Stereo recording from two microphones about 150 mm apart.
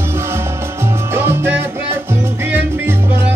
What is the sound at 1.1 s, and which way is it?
Music, 15° right (ahead or behind).